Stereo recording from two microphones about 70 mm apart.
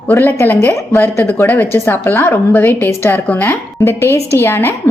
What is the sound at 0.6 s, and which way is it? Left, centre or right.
A woman's voice, left.